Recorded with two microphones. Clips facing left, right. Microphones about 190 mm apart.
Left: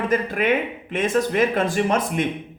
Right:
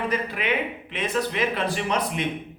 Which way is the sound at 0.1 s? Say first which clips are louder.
Left 6 dB; 45° left (ahead or behind).